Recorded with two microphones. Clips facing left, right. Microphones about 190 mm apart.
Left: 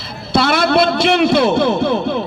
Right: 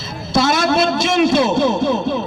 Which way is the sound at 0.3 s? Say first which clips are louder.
Left 2 dB; 60° left (ahead or behind).